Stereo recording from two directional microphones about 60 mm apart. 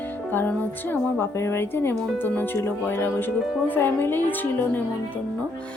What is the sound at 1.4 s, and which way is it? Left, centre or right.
Speech, left.